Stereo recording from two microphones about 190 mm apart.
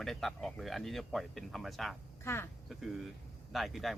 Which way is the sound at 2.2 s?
10° left (ahead or behind).